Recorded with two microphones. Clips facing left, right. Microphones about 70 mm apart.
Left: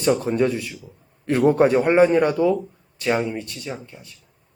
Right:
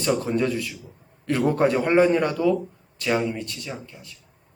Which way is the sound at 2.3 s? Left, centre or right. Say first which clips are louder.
Left 3 dB; left.